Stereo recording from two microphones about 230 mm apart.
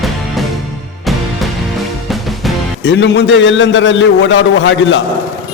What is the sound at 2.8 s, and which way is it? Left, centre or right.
A man's voice, left.